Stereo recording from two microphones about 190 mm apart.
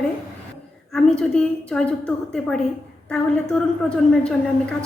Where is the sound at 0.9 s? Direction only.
5° left (ahead or behind).